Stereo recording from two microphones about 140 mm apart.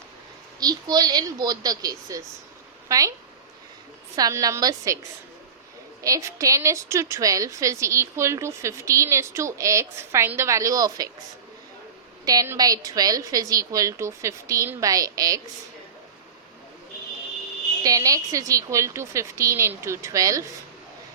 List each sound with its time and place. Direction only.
0.6 s a woman's voice: 30° right (ahead or behind)
4.1 s a woman's voice: 25° right (ahead or behind)
6.0 s a woman's voice: 25° right (ahead or behind)
12.2 s a woman's voice: 25° right (ahead or behind)
17.8 s a woman's voice: 25° right (ahead or behind)